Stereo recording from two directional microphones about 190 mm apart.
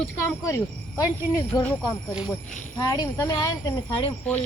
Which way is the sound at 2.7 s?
20° left (ahead or behind).